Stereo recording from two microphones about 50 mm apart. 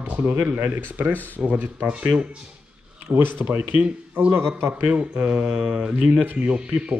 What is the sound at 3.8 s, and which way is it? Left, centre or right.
Speech, right.